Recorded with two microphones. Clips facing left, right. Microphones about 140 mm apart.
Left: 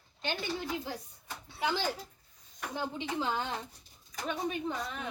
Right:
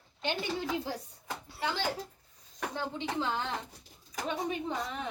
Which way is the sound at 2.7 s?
10° left (ahead or behind).